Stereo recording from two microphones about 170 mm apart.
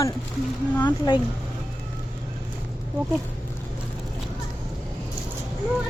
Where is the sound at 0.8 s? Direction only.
25° left (ahead or behind).